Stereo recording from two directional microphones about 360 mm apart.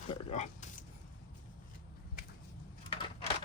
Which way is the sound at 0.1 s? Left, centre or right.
Centre.